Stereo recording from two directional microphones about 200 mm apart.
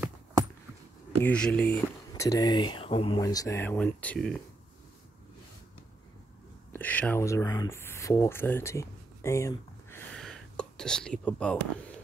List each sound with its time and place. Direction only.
0.0 s a sound: 15° right (ahead or behind)
1.2 s speech: 5° left (ahead or behind)
2.2 s speech: 20° left (ahead or behind)
6.7 s speech: 10° left (ahead or behind)